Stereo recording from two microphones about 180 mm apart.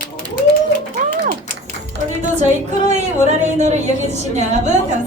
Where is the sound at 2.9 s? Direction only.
40° right (ahead or behind).